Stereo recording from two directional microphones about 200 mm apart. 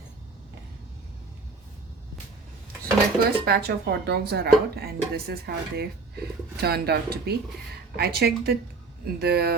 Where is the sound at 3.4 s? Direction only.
55° right (ahead or behind).